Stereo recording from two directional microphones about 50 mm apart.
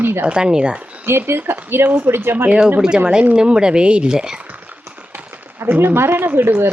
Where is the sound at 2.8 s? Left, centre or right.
Centre.